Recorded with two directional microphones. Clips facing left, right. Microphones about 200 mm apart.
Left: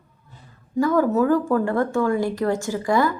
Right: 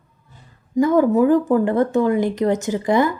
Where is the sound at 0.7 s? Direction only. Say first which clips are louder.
Right 4 dB; 20° right (ahead or behind).